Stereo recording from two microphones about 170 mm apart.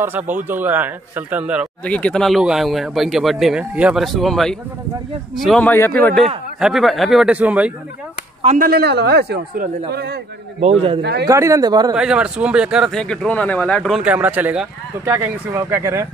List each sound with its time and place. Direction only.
0.0 s a man's voice: 10° right (ahead or behind)
1.9 s a man's voice: 5° left (ahead or behind)
6.6 s speech: centre (ahead or behind)
8.5 s a man's voice: 65° right (ahead or behind)
10.6 s a man's voice: 35° right (ahead or behind)
11.0 s a man's voice: 75° right (ahead or behind)
11.2 s speech: 20° right (ahead or behind)
11.9 s speech: 5° right (ahead or behind)